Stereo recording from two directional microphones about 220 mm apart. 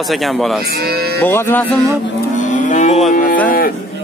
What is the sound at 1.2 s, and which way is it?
Music, 10° left (ahead or behind).